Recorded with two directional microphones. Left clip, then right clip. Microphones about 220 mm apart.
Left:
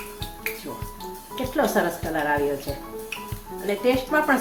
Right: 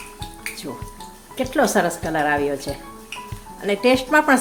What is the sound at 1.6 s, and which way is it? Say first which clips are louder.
Speech: right 4 dB; 40° right (ahead or behind).